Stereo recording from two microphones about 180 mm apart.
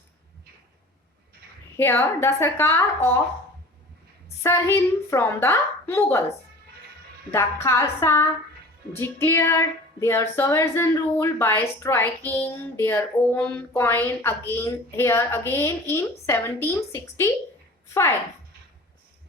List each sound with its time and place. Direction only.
1.8 s speech: 15° left (ahead or behind)
4.4 s speech: 15° left (ahead or behind)
7.3 s speech: 15° left (ahead or behind)